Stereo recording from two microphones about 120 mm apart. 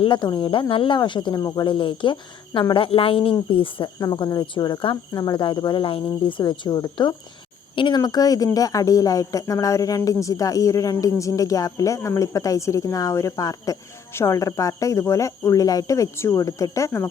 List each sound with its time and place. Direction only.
0.0 s speech: 40° left (ahead or behind)
1.4 s speech: 30° left (ahead or behind)
1.7 s speech: 45° left (ahead or behind)
4.0 s speech: 35° left (ahead or behind)